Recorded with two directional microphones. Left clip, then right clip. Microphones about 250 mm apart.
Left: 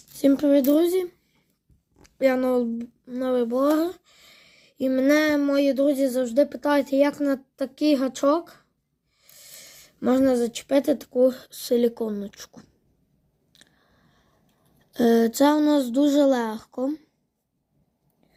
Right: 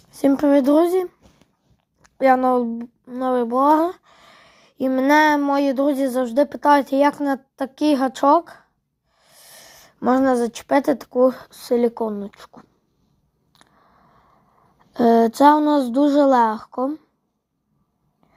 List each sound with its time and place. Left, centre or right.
0.1 s speech: centre
13.5 s a sound: centre
14.9 s a woman's voice: centre